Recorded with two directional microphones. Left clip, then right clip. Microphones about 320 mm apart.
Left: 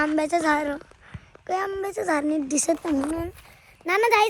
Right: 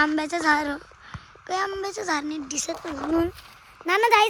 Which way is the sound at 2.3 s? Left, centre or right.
Centre.